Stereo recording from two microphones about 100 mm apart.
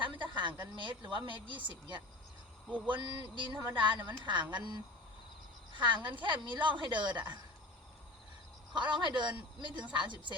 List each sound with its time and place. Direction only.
0.0 s a sound: 50° right (ahead or behind)
0.6 s a woman's voice: 50° right (ahead or behind)
8.8 s speech: 50° right (ahead or behind)